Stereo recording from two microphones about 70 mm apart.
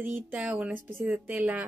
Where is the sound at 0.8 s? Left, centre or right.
Right.